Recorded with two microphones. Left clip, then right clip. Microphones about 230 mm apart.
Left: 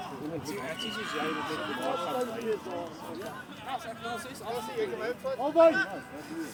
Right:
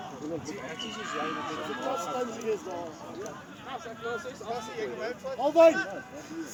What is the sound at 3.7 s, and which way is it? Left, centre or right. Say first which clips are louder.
Speech: right 1 dB; left.